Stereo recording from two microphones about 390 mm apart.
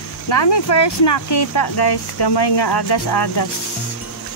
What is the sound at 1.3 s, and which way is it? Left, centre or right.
Speech, left.